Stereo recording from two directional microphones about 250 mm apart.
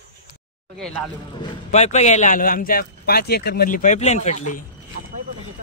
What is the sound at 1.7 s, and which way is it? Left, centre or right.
Speech, left.